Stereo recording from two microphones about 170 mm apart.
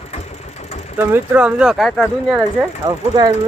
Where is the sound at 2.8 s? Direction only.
25° right (ahead or behind).